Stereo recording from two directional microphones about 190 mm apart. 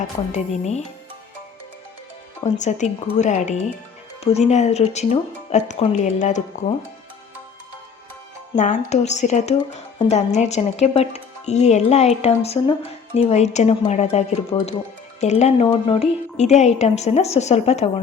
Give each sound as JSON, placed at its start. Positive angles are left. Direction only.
{"t": 0.3, "sound": "speech", "side_deg": 35}
{"t": 2.4, "sound": "speech", "side_deg": 40}
{"t": 8.5, "sound": "speech", "side_deg": 40}